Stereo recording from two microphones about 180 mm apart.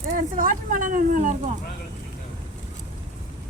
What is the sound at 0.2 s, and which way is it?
Speech, 50° right (ahead or behind).